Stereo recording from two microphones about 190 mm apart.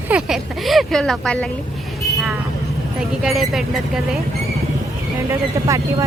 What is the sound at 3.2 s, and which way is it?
Speech, centre (ahead or behind).